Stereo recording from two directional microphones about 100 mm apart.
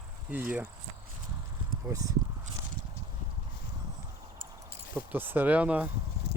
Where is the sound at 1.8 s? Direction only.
35° right (ahead or behind).